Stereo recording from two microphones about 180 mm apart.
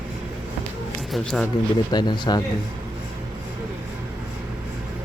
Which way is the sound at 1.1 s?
Centre (ahead or behind).